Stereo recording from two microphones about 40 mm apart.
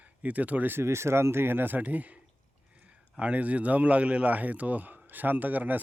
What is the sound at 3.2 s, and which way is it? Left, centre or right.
Speech, right.